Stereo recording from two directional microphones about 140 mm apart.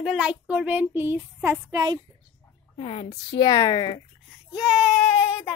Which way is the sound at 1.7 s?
25° right (ahead or behind).